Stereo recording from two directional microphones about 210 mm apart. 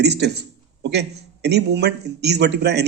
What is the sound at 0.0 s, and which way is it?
A man's voice, 50° right (ahead or behind).